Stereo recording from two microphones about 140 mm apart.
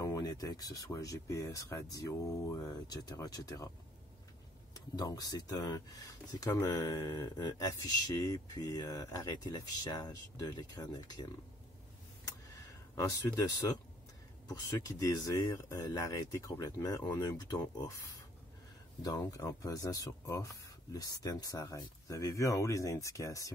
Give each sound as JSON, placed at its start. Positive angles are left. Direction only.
{"t": 0.0, "sound": "speech", "side_deg": 25}
{"t": 4.7, "sound": "speech", "side_deg": 30}
{"t": 12.9, "sound": "speech", "side_deg": 25}
{"t": 19.0, "sound": "speech", "side_deg": 25}